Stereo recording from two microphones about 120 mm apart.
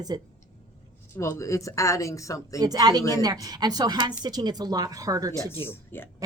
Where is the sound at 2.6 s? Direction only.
35° right (ahead or behind).